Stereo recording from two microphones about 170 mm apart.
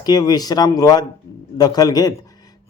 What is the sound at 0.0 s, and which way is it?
Speech, 25° left (ahead or behind).